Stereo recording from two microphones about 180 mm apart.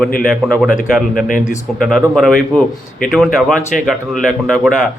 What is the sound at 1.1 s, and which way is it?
Speech, 50° left (ahead or behind).